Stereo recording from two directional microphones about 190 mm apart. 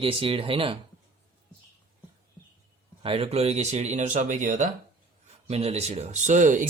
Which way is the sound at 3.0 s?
30° right (ahead or behind).